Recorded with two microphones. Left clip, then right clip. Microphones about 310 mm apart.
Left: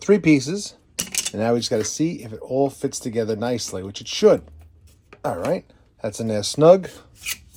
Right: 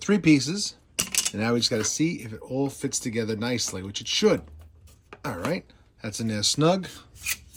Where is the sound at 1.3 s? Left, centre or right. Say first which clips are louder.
Left 5 dB; centre.